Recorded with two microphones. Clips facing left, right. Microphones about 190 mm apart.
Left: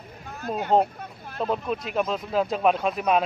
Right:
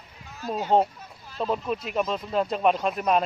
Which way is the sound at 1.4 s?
Centre (ahead or behind).